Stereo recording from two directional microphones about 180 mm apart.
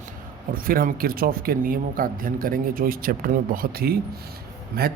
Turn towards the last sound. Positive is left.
turn(degrees=-60)  # may be behind; listen again after turning